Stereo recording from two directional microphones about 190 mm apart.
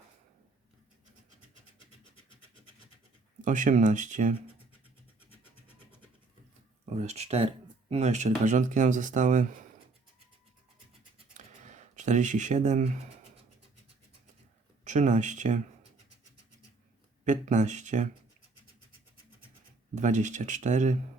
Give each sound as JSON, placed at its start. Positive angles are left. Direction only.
{"t": 3.4, "sound": "speech", "side_deg": -40}
{"t": 6.9, "sound": "speech", "side_deg": -35}
{"t": 11.3, "sound": "a sound", "side_deg": -40}
{"t": 14.8, "sound": "speech", "side_deg": -40}
{"t": 17.2, "sound": "speech", "side_deg": -40}
{"t": 20.0, "sound": "speech", "side_deg": -40}